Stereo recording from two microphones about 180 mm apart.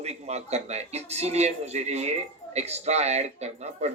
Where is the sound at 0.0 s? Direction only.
35° right (ahead or behind).